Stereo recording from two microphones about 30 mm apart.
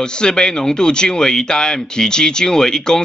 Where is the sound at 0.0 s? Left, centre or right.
Left.